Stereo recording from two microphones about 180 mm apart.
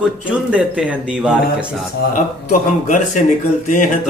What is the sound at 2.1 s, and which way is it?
A man's voice, 45° left (ahead or behind).